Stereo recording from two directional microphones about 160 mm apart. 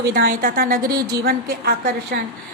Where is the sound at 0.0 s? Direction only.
70° right (ahead or behind).